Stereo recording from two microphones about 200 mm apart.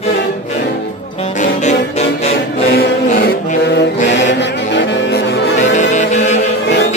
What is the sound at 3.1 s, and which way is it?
Mantra, 50° left (ahead or behind).